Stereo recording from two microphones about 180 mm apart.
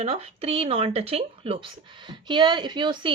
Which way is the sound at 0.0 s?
35° right (ahead or behind).